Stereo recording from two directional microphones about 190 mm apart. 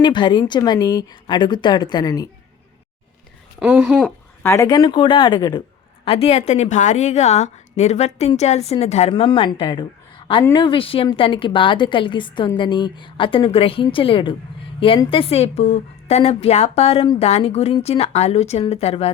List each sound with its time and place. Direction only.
0.0 s a woman's voice: 25° left (ahead or behind)
3.6 s speech: 5° right (ahead or behind)
4.4 s a woman's voice: 15° left (ahead or behind)